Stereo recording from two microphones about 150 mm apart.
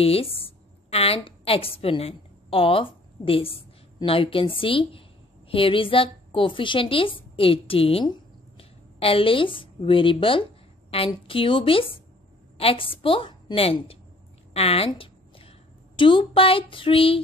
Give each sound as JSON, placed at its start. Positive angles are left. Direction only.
{"t": 0.0, "sound": "a woman's voice", "side_deg": 40}
{"t": 14.9, "sound": "a sound", "side_deg": 35}
{"t": 16.0, "sound": "a woman's voice", "side_deg": 35}